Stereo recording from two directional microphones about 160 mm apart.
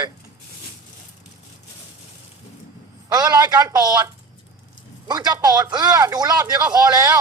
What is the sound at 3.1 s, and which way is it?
Speech, 25° right (ahead or behind).